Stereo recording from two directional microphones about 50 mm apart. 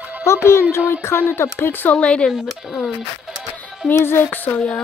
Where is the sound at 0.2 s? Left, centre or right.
Left.